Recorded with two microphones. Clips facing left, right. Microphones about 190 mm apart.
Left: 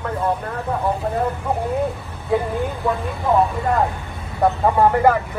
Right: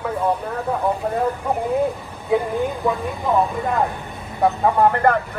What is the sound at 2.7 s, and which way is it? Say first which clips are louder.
Speech: right 1 dB; 15° right (ahead or behind).